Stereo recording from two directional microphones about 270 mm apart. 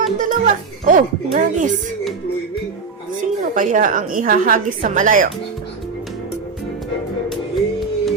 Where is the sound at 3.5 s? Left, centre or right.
Right.